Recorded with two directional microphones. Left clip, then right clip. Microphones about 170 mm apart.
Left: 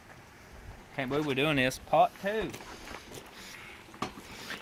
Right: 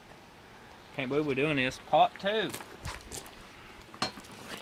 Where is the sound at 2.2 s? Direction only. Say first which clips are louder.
Right 2 dB; 20° left (ahead or behind).